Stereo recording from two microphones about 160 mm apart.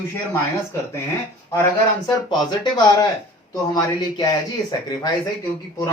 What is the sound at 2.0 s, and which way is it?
A man's voice, 25° left (ahead or behind).